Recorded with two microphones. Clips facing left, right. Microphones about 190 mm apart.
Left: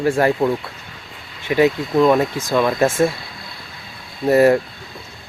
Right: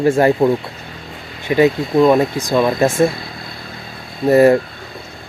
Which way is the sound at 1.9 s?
15° right (ahead or behind).